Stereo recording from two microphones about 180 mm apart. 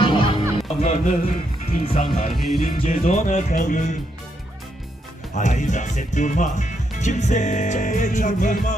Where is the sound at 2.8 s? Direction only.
45° left (ahead or behind).